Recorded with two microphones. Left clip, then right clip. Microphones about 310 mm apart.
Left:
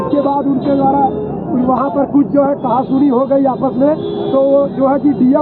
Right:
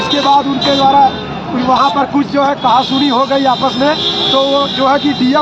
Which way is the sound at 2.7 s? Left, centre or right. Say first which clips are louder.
Right 2 dB; centre.